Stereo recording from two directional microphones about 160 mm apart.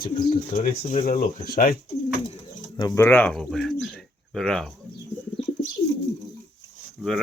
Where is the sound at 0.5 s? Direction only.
65° left (ahead or behind).